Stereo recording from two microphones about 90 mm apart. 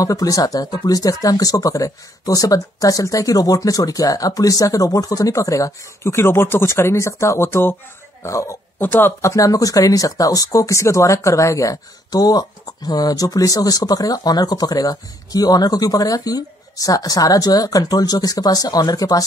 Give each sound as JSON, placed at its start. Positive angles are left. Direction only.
{"t": 0.0, "sound": "speech", "side_deg": 40}
{"t": 9.3, "sound": "speech", "side_deg": 40}